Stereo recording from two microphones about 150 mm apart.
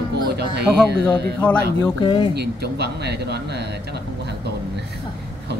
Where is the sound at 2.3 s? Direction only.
90° right.